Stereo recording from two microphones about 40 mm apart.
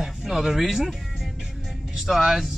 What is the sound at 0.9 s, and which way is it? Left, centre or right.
Music, centre.